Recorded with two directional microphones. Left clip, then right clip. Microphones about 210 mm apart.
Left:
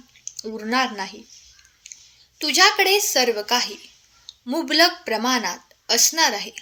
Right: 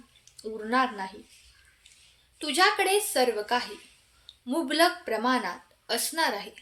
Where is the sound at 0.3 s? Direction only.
35° left (ahead or behind).